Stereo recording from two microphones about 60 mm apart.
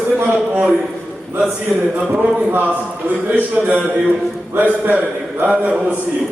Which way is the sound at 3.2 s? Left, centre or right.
Right.